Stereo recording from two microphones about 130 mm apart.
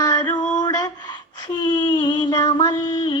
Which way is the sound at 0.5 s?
30° left (ahead or behind).